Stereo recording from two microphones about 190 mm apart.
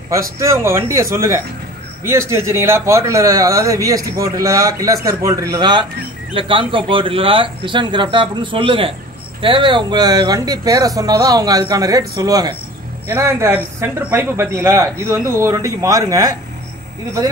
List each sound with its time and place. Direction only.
0.1 s speech: 15° right (ahead or behind)